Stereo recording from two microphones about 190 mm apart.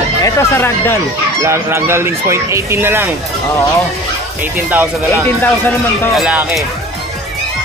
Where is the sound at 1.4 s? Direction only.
15° right (ahead or behind).